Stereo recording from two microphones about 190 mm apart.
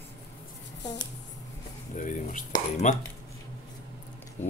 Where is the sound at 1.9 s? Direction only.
40° left (ahead or behind).